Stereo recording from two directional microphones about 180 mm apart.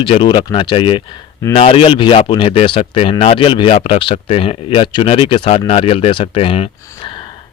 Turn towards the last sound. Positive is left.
turn(degrees=30)  # may be behind; listen again after turning